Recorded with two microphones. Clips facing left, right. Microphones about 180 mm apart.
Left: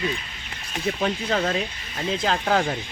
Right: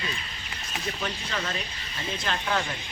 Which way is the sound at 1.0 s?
60° left (ahead or behind).